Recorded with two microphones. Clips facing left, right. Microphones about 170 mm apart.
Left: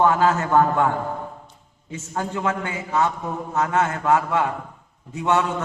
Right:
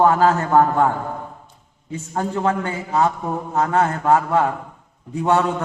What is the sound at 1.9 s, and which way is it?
A man's voice, 35° right (ahead or behind).